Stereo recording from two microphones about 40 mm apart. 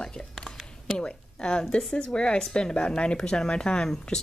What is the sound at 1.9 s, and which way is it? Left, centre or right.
Speech, left.